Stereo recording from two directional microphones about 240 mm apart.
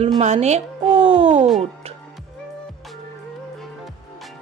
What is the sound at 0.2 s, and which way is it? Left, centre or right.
Speech, right.